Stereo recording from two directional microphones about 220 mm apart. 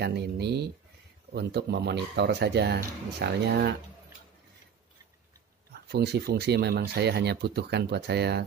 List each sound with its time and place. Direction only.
0.0 s speech: 50° right (ahead or behind)
5.7 s speech: 50° right (ahead or behind)